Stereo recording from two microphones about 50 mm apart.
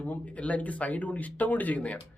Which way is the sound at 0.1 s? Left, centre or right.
Left.